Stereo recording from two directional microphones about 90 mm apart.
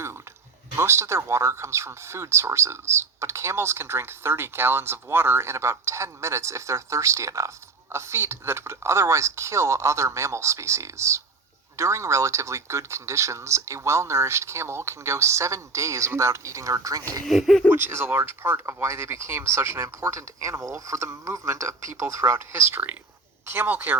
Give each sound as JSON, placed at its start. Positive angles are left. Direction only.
{"t": 0.8, "sound": "speech", "side_deg": -30}
{"t": 17.2, "sound": "speech", "side_deg": 0}
{"t": 17.7, "sound": "speech", "side_deg": -20}